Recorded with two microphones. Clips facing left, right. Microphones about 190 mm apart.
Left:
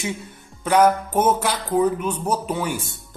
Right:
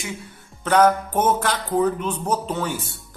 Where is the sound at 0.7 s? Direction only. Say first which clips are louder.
Even; 10° left (ahead or behind).